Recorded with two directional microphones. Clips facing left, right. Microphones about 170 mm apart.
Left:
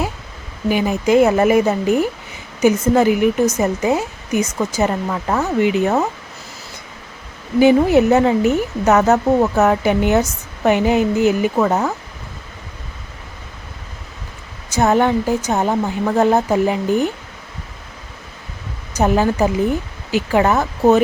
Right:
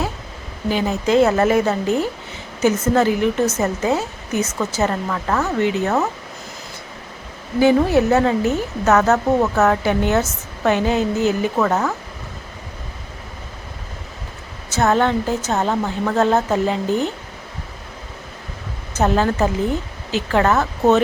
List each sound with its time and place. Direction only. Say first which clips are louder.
0.7 s speech: left 3 dB; 15° left (ahead or behind)
7.6 s speech: left 3 dB; 15° left (ahead or behind)
14.7 s speech: left 2 dB; 15° left (ahead or behind)
18.9 s speech: left 2 dB; 15° left (ahead or behind)